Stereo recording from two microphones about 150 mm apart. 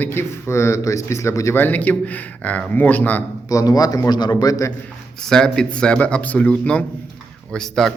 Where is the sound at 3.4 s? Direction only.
25° left (ahead or behind).